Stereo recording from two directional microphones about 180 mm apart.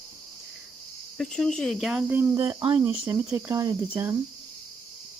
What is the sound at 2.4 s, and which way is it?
Speech, 25° right (ahead or behind).